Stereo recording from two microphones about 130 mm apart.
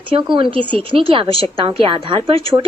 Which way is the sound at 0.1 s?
40° right (ahead or behind).